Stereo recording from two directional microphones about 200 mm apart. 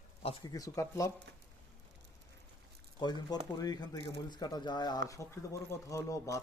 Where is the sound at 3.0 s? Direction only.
20° left (ahead or behind).